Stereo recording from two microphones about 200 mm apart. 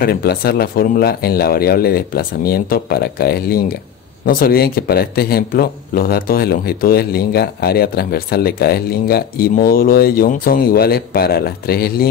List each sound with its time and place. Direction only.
0.0 s a man's voice: 50° left (ahead or behind)